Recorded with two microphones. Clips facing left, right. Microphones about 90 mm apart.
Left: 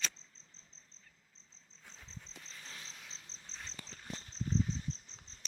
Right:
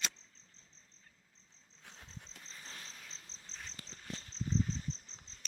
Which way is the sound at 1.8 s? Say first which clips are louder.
Right 1 dB; 55° right (ahead or behind).